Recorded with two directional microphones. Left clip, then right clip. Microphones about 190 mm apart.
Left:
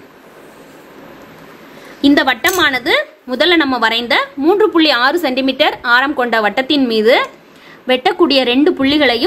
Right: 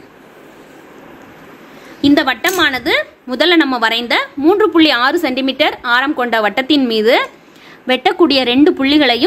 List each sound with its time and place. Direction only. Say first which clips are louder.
2.0 s a woman's voice: left 1 dB; 10° right (ahead or behind)